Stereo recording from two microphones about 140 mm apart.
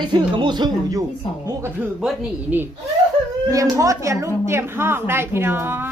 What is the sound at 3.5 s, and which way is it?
A woman's voice, 25° right (ahead or behind).